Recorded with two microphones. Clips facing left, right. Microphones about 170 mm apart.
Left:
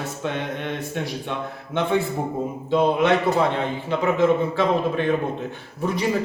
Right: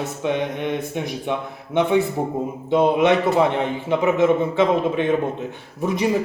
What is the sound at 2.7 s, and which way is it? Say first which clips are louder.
A man's voice: right 2 dB; 20° right (ahead or behind).